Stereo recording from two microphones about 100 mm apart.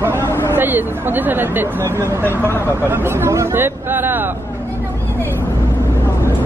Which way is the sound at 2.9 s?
25° right (ahead or behind).